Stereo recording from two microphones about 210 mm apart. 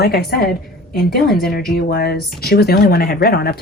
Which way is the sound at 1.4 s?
45° left (ahead or behind).